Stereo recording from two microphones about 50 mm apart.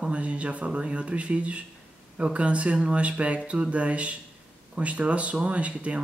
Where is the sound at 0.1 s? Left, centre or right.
Right.